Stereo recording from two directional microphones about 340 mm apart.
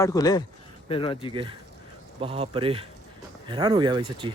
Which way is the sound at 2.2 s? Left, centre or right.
Centre.